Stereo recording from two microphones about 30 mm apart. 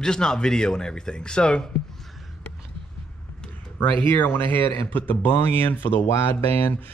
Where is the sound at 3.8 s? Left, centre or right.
Left.